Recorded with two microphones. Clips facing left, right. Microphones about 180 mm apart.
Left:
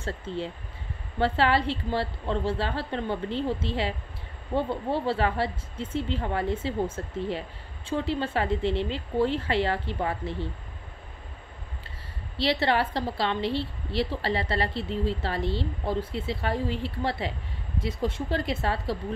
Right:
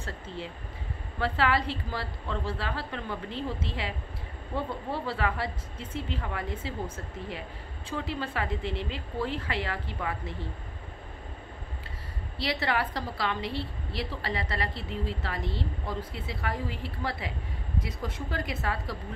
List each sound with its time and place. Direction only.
1.2 s a woman's voice: 30° left (ahead or behind)
7.9 s a woman's voice: 30° left (ahead or behind)
12.4 s a woman's voice: 30° left (ahead or behind)